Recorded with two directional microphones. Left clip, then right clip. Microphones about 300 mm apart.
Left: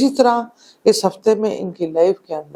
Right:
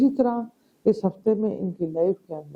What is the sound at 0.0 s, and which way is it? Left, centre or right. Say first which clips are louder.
A woman's voice: left 8 dB; centre.